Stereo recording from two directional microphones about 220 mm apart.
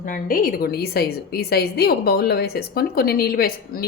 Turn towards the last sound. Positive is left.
turn(degrees=45)  # may be behind; listen again after turning